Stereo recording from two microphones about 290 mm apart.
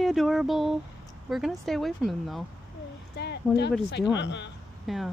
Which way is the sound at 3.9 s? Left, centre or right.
Left.